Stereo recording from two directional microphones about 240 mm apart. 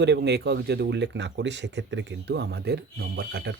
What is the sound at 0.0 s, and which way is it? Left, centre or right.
Speech, right.